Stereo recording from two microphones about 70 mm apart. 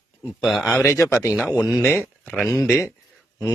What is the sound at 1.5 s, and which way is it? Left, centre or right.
Speech, centre.